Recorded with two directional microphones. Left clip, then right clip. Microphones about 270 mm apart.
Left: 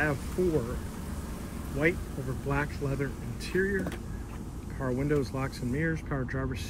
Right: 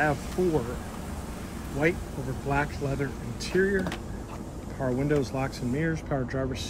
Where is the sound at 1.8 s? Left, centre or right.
Centre.